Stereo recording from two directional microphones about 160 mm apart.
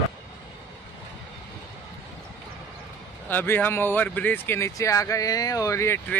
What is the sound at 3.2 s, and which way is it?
Speech, 10° left (ahead or behind).